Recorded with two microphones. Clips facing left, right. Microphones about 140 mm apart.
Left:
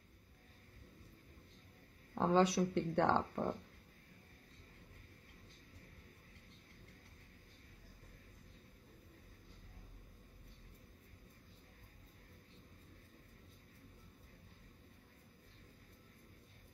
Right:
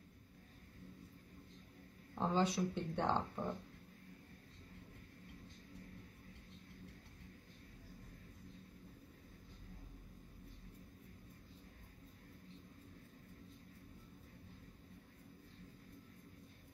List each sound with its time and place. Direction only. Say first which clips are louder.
2.1 s speech: left 4 dB; 65° left (ahead or behind)